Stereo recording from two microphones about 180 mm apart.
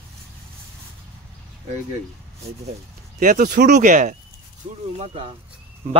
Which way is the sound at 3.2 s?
50° right (ahead or behind).